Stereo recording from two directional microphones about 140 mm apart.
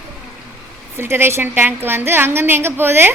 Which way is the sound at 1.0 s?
15° right (ahead or behind).